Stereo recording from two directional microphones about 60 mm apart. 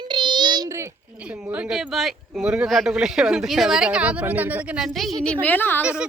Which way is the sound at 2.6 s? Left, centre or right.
Centre.